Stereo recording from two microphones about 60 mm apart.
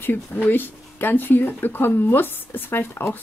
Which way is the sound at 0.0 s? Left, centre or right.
Left.